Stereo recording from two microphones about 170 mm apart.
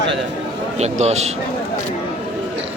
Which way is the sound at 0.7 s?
40° right (ahead or behind).